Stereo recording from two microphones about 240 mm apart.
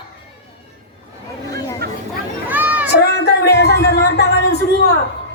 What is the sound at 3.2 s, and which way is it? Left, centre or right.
Music, left.